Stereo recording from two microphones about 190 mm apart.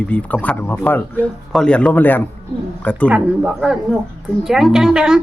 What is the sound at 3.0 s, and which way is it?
Speech, 10° right (ahead or behind).